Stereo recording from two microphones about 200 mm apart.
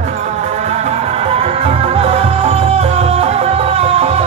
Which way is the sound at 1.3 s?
30° right (ahead or behind).